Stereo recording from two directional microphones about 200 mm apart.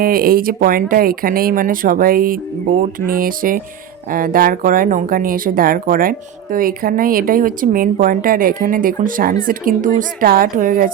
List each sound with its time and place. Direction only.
0.0 s speech: 45° right (ahead or behind)